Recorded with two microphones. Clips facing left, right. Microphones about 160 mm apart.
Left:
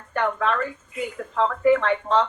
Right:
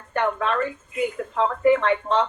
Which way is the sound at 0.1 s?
25° right (ahead or behind).